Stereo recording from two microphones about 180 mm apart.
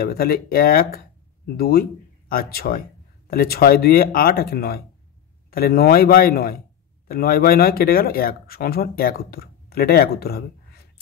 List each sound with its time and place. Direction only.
0.0 s speech: 55° left (ahead or behind)